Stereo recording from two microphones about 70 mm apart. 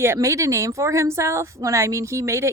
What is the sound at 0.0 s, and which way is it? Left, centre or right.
Speech, right.